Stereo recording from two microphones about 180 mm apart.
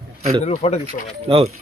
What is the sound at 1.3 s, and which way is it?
Speech, 30° right (ahead or behind).